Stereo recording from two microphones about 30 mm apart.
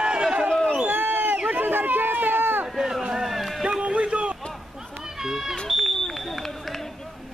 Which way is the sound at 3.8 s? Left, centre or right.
Right.